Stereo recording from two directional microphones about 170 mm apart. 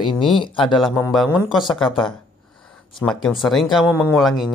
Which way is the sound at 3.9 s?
15° left (ahead or behind).